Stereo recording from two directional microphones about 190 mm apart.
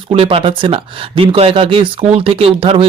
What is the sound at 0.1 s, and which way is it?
Speech, 30° right (ahead or behind).